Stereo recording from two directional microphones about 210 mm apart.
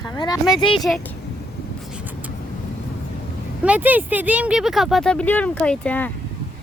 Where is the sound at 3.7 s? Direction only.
5° right (ahead or behind).